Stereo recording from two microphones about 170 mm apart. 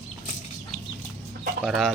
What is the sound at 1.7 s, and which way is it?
Speech, centre (ahead or behind).